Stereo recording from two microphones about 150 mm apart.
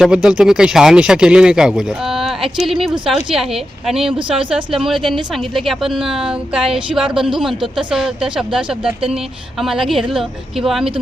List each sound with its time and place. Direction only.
0.0 s speech: 5° right (ahead or behind)
4.2 s speech: 35° right (ahead or behind)
4.4 s speech: 5° right (ahead or behind)